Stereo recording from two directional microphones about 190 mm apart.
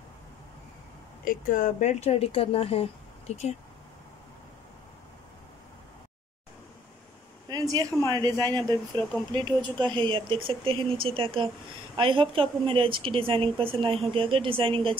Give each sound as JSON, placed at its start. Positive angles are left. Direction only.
{"t": 1.2, "sound": "speech", "side_deg": 45}
{"t": 7.4, "sound": "a sound", "side_deg": -20}
{"t": 8.1, "sound": "speech", "side_deg": -20}